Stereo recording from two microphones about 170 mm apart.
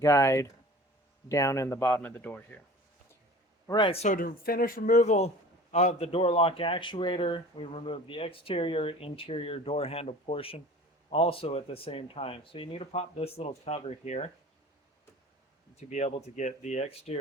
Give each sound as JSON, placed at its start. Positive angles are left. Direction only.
{"t": 0.0, "sound": "speech", "side_deg": 20}
{"t": 3.7, "sound": "speech", "side_deg": 30}
{"t": 4.0, "sound": "speech", "side_deg": 55}
{"t": 15.9, "sound": "speech", "side_deg": 40}